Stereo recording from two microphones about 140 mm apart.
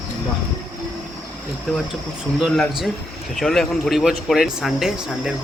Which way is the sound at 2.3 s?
Centre (ahead or behind).